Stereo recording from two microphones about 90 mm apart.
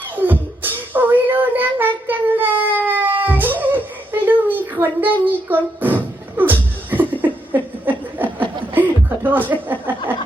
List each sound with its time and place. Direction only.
0.2 s child singing: 20° right (ahead or behind)
2.0 s baby cry: 20° right (ahead or behind)
3.2 s a sound: 20° right (ahead or behind)
8.7 s chuckle: 20° right (ahead or behind)
9.5 s speech: 20° right (ahead or behind)